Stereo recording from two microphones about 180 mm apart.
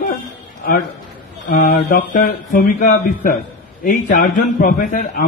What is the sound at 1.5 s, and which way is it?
A man's voice, 50° left (ahead or behind).